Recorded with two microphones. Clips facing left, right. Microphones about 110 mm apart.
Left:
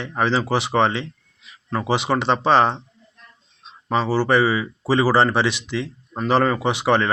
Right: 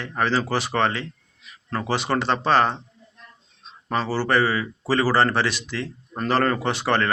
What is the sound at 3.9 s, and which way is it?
Speech, 15° left (ahead or behind).